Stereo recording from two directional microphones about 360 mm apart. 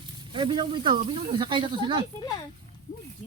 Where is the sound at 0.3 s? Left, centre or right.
Centre.